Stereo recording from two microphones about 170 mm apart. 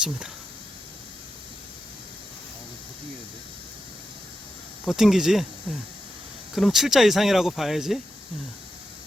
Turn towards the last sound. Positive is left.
turn(degrees=0)  # may be behind; listen again after turning